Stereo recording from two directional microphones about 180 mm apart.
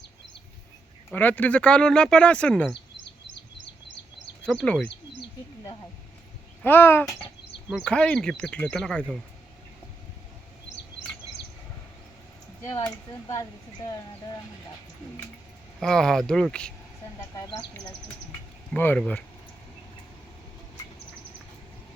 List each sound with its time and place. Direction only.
1.1 s speech: 10° left (ahead or behind)
4.4 s speech: 5° left (ahead or behind)
6.6 s speech: 10° left (ahead or behind)
12.7 s speech: 25° left (ahead or behind)
15.8 s speech: 5° left (ahead or behind)
17.3 s speech: 20° left (ahead or behind)
18.7 s speech: 10° left (ahead or behind)